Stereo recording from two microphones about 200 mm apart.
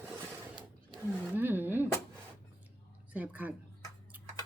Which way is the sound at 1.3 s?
10° right (ahead or behind).